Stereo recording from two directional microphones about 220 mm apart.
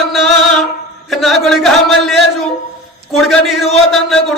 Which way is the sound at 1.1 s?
Centre (ahead or behind).